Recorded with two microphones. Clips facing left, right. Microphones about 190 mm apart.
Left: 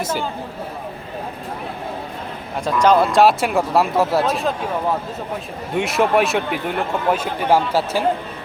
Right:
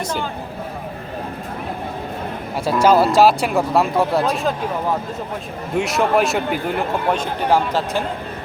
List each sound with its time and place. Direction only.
2.6 s a man's voice: 5° right (ahead or behind)
5.7 s a man's voice: centre (ahead or behind)